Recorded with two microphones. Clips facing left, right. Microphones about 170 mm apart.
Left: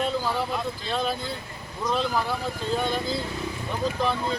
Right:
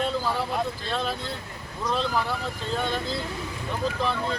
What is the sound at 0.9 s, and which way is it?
Speech, centre (ahead or behind).